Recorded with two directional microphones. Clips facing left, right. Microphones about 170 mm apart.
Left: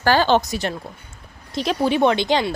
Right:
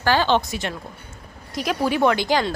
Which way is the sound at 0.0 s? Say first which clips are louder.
Left 2 dB; 40° left (ahead or behind).